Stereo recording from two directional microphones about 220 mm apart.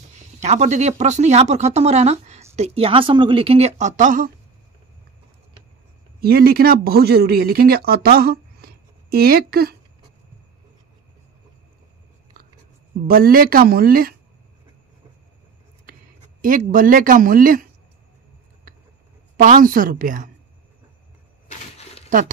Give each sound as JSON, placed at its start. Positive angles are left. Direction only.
{"t": 0.4, "sound": "speech", "side_deg": -30}
{"t": 6.2, "sound": "speech", "side_deg": -45}
{"t": 13.0, "sound": "speech", "side_deg": -40}
{"t": 15.8, "sound": "speech", "side_deg": -40}
{"t": 18.7, "sound": "a sound", "side_deg": -40}
{"t": 19.3, "sound": "speech", "side_deg": -40}
{"t": 21.5, "sound": "a sound", "side_deg": 30}